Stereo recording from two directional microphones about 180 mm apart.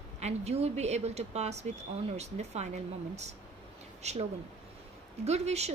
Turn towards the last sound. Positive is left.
turn(degrees=-35)  # may be behind; listen again after turning